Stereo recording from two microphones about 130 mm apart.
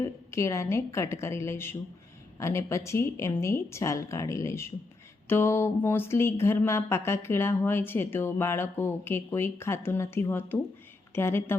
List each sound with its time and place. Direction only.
0.0 s speech: 25° left (ahead or behind)